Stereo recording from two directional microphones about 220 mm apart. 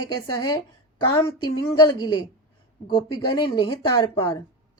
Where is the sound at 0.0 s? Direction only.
20° left (ahead or behind).